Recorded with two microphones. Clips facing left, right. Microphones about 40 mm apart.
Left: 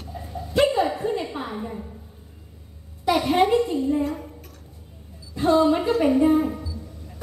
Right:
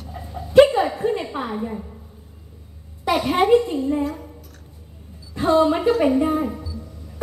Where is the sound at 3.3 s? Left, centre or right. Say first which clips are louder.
Right 4 dB; centre.